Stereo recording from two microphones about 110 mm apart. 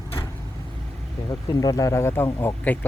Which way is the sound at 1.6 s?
30° left (ahead or behind).